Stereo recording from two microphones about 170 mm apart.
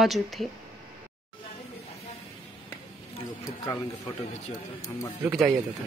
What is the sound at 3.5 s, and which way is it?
Speech, 20° left (ahead or behind).